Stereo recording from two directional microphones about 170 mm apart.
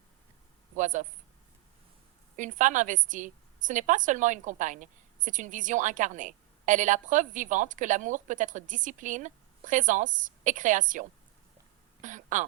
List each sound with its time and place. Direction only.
0.8 s speech: 45° right (ahead or behind)
2.3 s a woman's voice: 50° right (ahead or behind)
12.0 s a woman's voice: 50° right (ahead or behind)